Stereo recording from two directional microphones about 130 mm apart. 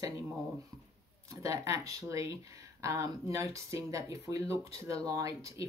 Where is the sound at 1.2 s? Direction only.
25° right (ahead or behind).